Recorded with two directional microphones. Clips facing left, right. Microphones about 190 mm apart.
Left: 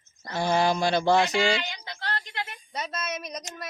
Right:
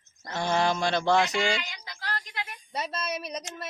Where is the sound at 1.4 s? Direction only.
30° left (ahead or behind).